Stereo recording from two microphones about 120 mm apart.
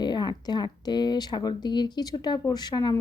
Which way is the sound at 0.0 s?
35° left (ahead or behind).